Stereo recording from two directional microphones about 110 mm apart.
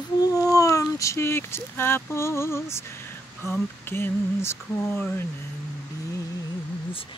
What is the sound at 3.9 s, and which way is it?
Speech, 20° left (ahead or behind).